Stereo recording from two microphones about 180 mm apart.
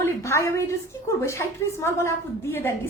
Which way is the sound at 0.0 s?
15° left (ahead or behind).